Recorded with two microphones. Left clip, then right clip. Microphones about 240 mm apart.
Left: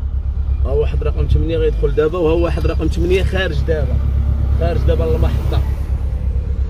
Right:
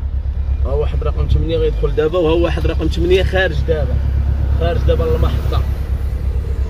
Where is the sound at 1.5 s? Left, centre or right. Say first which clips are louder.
Even; left.